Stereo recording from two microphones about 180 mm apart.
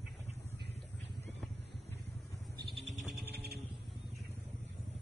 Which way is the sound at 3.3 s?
65° right (ahead or behind).